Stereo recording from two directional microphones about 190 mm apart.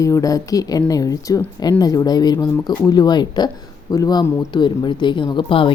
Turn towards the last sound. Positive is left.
turn(degrees=25)  # may be behind; listen again after turning